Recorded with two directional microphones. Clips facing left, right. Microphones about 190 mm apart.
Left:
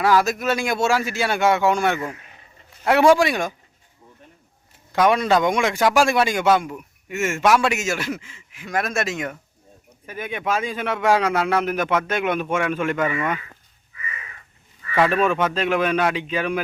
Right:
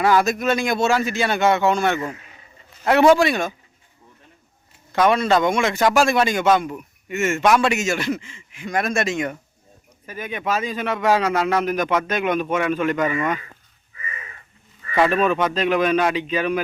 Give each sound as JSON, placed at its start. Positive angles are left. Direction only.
{"t": 0.0, "sound": "speech", "side_deg": 0}
{"t": 4.9, "sound": "a man's voice", "side_deg": 10}
{"t": 13.9, "sound": "crow", "side_deg": -30}
{"t": 15.1, "sound": "speech", "side_deg": 10}